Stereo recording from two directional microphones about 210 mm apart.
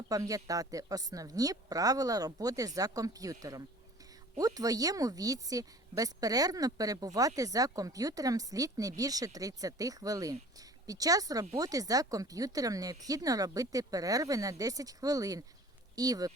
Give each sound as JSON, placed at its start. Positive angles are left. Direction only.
{"t": 0.1, "sound": "a woman's voice", "side_deg": -15}